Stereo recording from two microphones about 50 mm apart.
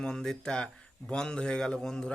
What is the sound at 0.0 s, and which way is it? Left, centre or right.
Speech, centre.